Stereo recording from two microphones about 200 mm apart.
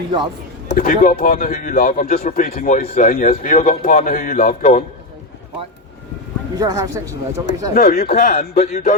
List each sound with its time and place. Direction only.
0.7 s speech: 45° left (ahead or behind)
6.6 s speech: 20° right (ahead or behind)
7.7 s speech: 50° left (ahead or behind)